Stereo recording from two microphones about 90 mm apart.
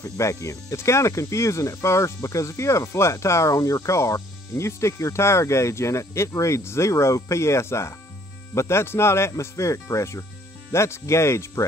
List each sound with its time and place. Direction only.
0.0 s speech: 35° left (ahead or behind)